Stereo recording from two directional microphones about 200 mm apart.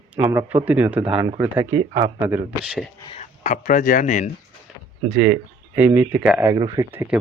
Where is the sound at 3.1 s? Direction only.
35° left (ahead or behind).